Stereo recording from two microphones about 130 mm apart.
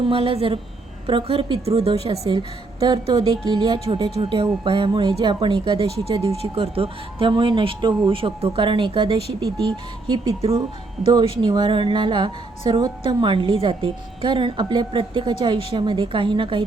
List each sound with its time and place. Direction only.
0.0 s a woman's voice: 45° right (ahead or behind)